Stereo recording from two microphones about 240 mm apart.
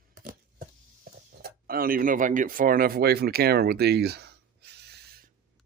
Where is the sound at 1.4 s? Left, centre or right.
Right.